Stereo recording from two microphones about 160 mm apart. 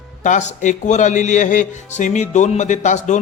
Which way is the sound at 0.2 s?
50° left (ahead or behind).